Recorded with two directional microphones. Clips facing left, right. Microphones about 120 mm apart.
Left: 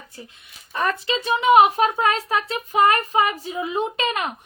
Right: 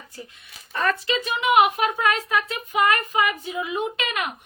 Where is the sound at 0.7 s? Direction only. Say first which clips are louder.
Even; 20° left (ahead or behind).